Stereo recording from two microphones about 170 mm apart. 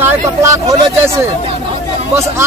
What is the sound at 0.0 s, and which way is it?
Speech, 15° right (ahead or behind).